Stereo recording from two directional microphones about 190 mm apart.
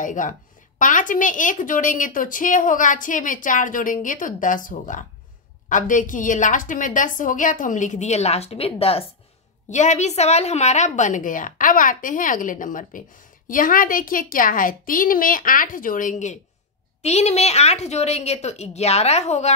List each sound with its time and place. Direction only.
0.0 s a woman's voice: 40° left (ahead or behind)